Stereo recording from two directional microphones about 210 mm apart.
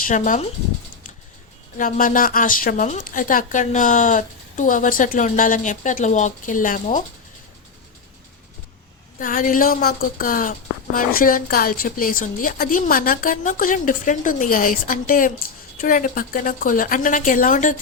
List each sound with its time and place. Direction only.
0.0 s a woman's voice: 35° left (ahead or behind)
1.8 s a woman's voice: 40° left (ahead or behind)
9.1 s a woman's voice: 40° left (ahead or behind)